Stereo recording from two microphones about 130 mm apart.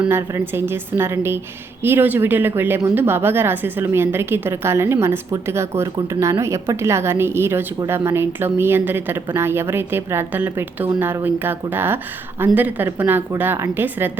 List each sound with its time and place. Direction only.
0.1 s a woman's voice: 20° right (ahead or behind)